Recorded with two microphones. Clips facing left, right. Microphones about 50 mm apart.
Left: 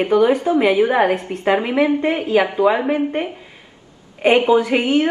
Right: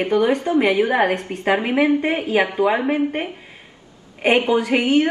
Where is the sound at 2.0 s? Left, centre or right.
Centre.